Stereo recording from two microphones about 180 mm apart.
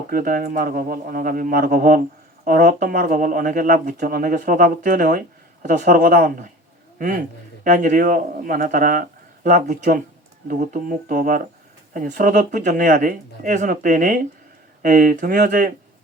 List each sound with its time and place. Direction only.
0.1 s a man's voice: 50° right (ahead or behind)